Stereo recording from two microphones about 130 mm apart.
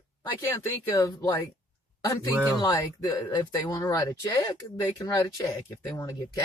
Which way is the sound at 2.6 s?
30° left (ahead or behind).